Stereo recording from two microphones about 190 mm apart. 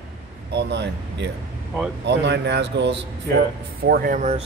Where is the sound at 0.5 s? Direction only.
60° right (ahead or behind).